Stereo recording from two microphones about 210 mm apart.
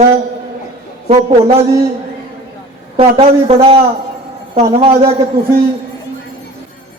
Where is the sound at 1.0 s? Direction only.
30° right (ahead or behind).